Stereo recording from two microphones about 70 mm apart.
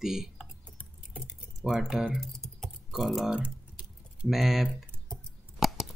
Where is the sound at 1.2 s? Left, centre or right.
Centre.